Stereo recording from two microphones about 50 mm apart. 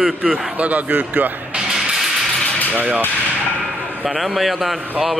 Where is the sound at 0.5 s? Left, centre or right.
Right.